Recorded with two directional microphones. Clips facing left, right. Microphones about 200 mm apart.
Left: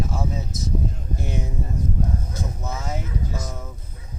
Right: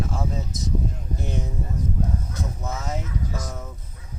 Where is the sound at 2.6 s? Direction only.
Centre (ahead or behind).